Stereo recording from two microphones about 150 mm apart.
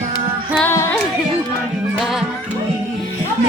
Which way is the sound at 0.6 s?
10° left (ahead or behind).